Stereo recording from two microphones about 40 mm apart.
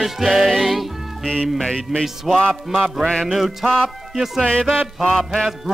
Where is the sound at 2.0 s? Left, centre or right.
Centre.